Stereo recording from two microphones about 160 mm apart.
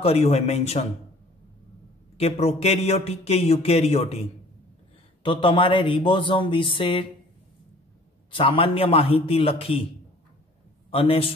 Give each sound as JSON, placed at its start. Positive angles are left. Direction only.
{"t": 0.0, "sound": "speech", "side_deg": 40}
{"t": 2.1, "sound": "speech", "side_deg": 40}
{"t": 8.3, "sound": "speech", "side_deg": 35}
{"t": 10.9, "sound": "speech", "side_deg": 35}